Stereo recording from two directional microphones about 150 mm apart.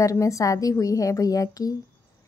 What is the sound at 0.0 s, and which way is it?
A woman's voice, 20° left (ahead or behind).